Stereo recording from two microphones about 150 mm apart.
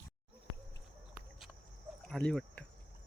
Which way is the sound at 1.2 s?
Centre (ahead or behind).